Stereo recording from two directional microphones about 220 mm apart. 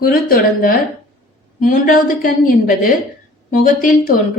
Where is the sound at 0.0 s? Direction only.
40° left (ahead or behind).